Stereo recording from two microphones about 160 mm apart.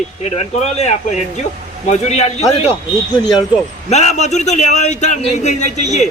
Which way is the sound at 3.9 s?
45° left (ahead or behind).